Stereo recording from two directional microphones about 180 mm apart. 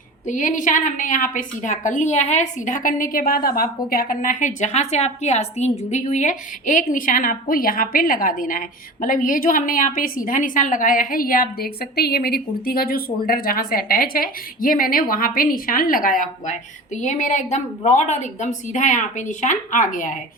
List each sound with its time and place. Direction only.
0.3 s a woman's voice: 45° left (ahead or behind)